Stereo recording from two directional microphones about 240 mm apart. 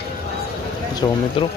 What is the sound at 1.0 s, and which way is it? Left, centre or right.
Speech, left.